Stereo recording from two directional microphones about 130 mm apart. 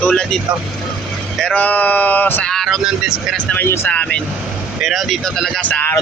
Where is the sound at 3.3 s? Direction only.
10° left (ahead or behind).